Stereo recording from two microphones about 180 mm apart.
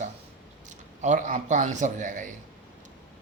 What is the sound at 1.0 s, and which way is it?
A man's voice, 45° right (ahead or behind).